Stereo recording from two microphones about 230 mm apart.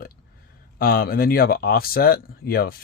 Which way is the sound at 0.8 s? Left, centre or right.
Left.